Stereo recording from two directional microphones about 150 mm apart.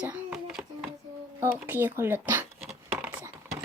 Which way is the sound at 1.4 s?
15° right (ahead or behind).